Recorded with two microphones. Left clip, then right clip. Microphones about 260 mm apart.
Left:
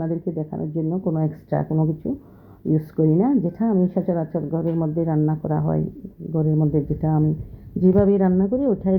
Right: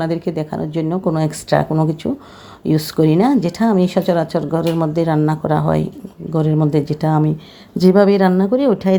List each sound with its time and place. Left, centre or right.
0.1 s speech: right